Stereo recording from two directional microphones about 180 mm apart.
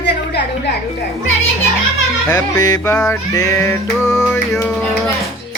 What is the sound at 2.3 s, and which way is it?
Music, 20° left (ahead or behind).